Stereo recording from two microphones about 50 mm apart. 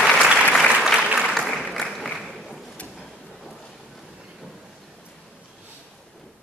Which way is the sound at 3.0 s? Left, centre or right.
Centre.